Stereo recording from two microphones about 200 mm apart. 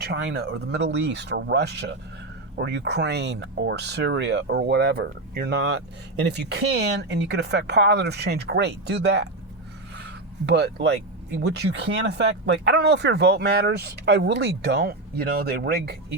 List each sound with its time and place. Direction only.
0.0 s speech: 55° right (ahead or behind)
9.9 s a sound: 60° right (ahead or behind)
11.4 s speech: 55° right (ahead or behind)